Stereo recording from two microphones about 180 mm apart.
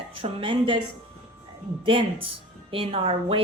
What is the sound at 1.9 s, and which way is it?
A woman's voice, 30° right (ahead or behind).